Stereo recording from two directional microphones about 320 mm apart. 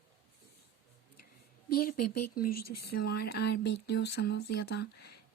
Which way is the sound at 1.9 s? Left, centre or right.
Left.